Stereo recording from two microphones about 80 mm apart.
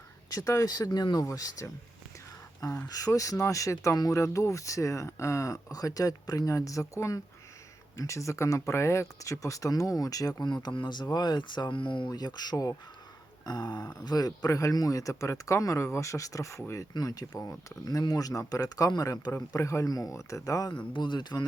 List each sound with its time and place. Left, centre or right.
0.3 s speech: left
2.8 s a man's voice: left
13.4 s a sound: left
14.0 s speech: left
16.9 s speech: left
20.9 s a man's voice: left